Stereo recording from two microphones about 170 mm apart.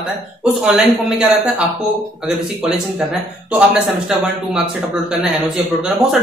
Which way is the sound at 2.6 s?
5° right (ahead or behind).